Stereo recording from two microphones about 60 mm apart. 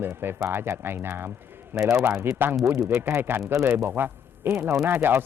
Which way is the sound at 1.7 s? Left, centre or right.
Right.